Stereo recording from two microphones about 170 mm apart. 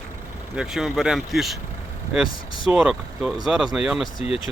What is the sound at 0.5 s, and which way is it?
Speech, 5° right (ahead or behind).